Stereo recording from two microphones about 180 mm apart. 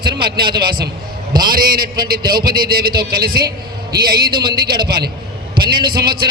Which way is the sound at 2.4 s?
55° right (ahead or behind).